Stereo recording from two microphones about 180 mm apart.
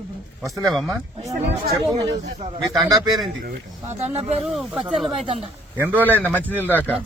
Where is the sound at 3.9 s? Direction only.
35° right (ahead or behind).